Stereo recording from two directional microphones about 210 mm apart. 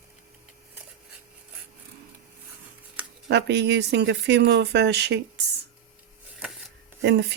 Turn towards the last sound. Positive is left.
turn(degrees=-55)  # may be behind; listen again after turning